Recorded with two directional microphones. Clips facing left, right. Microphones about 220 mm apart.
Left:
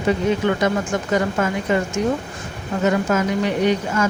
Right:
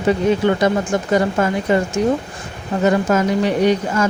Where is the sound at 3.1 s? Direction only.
35° right (ahead or behind).